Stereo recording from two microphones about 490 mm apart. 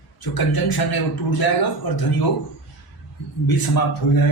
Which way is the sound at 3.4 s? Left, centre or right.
Left.